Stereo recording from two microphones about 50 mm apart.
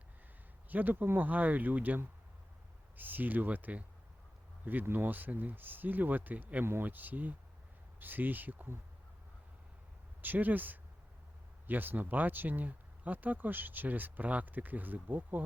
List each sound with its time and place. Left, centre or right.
0.7 s speech: right
3.0 s speech: right
10.2 s speech: right